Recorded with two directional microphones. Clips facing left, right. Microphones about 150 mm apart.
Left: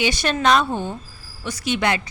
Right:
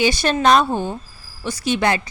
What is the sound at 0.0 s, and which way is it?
Speech, 35° right (ahead or behind).